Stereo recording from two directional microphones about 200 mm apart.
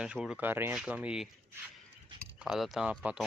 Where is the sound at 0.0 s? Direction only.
5° right (ahead or behind).